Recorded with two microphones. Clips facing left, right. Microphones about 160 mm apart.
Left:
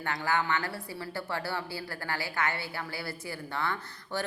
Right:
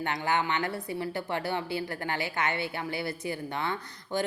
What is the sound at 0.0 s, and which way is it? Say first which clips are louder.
A woman's voice: right 2 dB; 20° right (ahead or behind).